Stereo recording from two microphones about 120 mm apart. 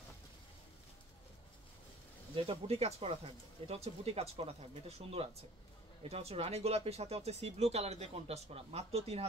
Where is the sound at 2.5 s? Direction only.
60° right (ahead or behind).